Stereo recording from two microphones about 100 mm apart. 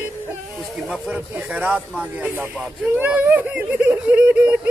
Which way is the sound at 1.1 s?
15° right (ahead or behind).